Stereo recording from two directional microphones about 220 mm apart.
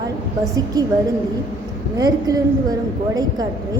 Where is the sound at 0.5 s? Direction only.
15° right (ahead or behind).